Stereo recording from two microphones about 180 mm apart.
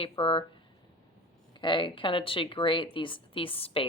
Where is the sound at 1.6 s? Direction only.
25° left (ahead or behind).